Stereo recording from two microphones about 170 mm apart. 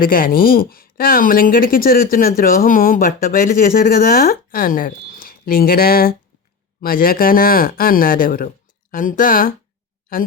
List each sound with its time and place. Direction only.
0.0 s speech: 60° left (ahead or behind)